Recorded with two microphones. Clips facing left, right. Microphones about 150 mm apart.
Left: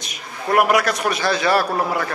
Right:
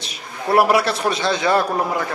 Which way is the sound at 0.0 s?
30° right (ahead or behind).